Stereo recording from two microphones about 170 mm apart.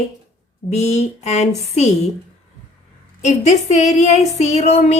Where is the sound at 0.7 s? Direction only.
40° left (ahead or behind).